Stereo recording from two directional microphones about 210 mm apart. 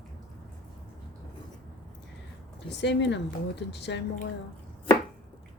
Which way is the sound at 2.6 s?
55° left (ahead or behind).